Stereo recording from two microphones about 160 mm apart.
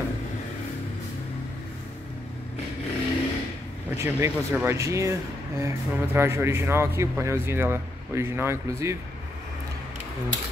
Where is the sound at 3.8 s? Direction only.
15° right (ahead or behind).